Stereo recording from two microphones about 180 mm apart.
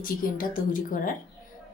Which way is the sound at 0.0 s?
50° left (ahead or behind).